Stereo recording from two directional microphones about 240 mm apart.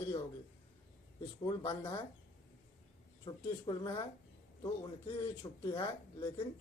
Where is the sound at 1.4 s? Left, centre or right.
Left.